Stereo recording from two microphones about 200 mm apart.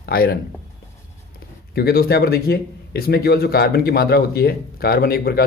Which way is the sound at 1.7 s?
50° left (ahead or behind).